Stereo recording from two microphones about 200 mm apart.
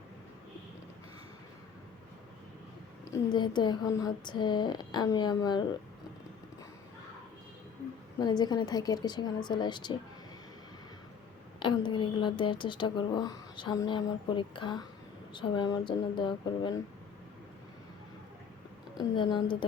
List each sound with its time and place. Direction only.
3.3 s speech: 20° left (ahead or behind)
8.2 s speech: 20° left (ahead or behind)
11.6 s speech: 25° left (ahead or behind)
18.9 s speech: 25° left (ahead or behind)